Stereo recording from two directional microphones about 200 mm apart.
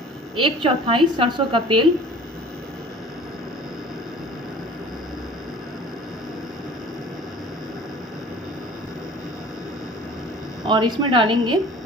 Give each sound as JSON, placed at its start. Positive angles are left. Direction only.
{"t": 0.4, "sound": "a woman's voice", "side_deg": -25}
{"t": 10.6, "sound": "a woman's voice", "side_deg": -20}